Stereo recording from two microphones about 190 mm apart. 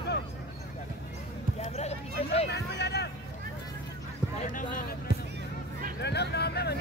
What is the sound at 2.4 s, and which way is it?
Speech, 60° left (ahead or behind).